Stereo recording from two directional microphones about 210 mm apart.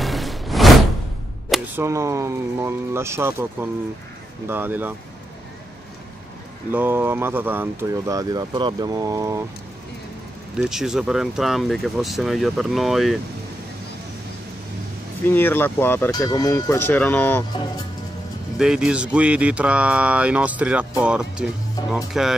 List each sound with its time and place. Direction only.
0.0 s music: centre (ahead or behind)
1.8 s speech: 15° right (ahead or behind)
6.7 s speech: 10° right (ahead or behind)
10.6 s speech: centre (ahead or behind)
15.2 s speech: 10° left (ahead or behind)
18.6 s speech: 5° right (ahead or behind)